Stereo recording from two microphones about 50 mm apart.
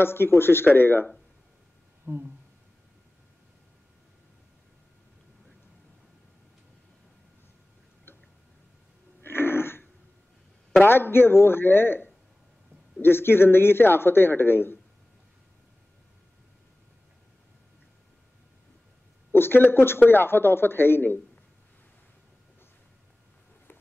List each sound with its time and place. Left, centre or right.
0.0 s speech: left
2.1 s speech: right
9.2 s throat clearing: left
10.8 s speech: left
19.3 s speech: left